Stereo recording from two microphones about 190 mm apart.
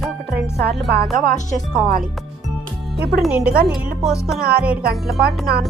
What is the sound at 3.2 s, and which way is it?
Speech, 5° right (ahead or behind).